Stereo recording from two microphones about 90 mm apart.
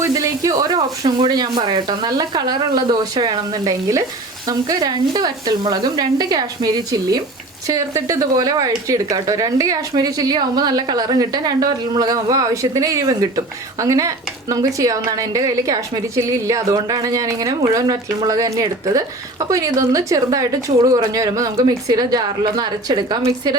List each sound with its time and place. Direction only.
0.0 s a woman's voice: 35° right (ahead or behind); by 23.2 s 55° right (ahead or behind)